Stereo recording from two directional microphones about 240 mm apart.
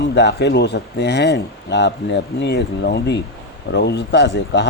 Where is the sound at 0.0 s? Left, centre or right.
Left.